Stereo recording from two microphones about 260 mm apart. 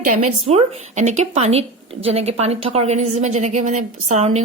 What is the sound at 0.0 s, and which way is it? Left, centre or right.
Speech, right.